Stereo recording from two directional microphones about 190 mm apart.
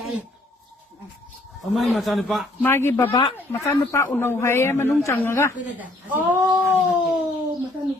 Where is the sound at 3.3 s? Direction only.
15° left (ahead or behind).